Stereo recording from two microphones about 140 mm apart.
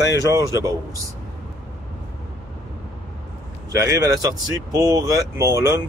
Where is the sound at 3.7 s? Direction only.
20° right (ahead or behind).